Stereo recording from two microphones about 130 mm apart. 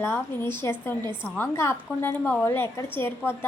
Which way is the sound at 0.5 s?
15° left (ahead or behind).